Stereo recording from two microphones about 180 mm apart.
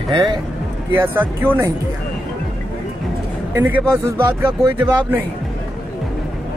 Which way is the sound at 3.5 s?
15° right (ahead or behind).